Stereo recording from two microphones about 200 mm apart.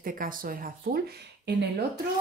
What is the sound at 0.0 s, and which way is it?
Speech, 45° right (ahead or behind).